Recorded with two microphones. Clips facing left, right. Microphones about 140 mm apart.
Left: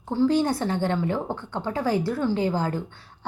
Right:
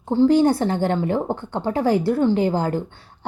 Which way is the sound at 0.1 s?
25° right (ahead or behind).